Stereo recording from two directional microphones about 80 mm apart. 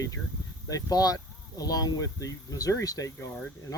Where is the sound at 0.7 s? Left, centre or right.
Left.